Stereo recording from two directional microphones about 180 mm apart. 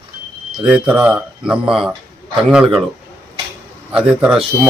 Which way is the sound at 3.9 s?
5° right (ahead or behind).